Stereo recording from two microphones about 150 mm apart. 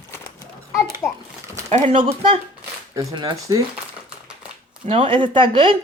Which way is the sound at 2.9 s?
20° right (ahead or behind).